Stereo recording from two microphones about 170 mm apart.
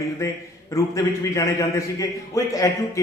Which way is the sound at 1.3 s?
20° left (ahead or behind).